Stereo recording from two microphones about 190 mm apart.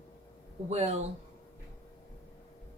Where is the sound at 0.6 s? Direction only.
35° right (ahead or behind).